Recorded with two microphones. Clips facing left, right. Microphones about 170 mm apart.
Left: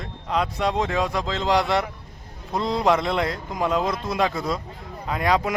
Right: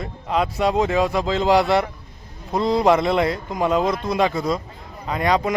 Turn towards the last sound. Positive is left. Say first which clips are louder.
# right 2 dB
turn(degrees=5)  # may be behind; listen again after turning